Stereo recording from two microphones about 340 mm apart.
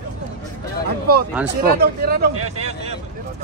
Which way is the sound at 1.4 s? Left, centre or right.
Right.